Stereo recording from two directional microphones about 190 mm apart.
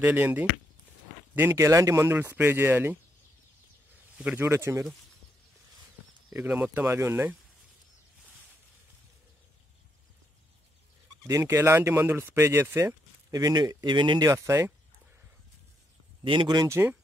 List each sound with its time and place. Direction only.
0.0 s speech: 10° right (ahead or behind)
4.2 s speech: 10° right (ahead or behind)
6.3 s speech: 5° right (ahead or behind)
11.2 s speech: 15° right (ahead or behind)
16.3 s speech: 25° right (ahead or behind)